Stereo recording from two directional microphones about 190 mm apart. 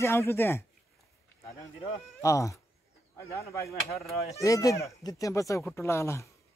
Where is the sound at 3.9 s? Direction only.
Centre (ahead or behind).